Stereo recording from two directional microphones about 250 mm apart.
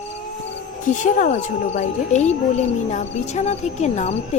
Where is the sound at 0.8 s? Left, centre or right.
Left.